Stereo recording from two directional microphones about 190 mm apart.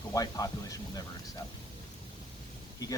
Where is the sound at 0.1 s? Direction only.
20° left (ahead or behind).